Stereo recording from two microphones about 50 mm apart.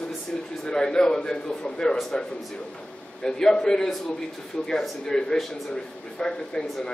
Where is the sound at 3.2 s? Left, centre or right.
Centre.